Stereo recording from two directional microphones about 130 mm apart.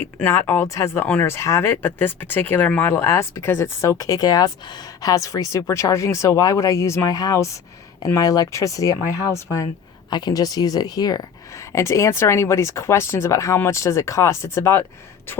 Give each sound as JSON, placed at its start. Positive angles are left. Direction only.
{"t": 0.2, "sound": "speech", "side_deg": 20}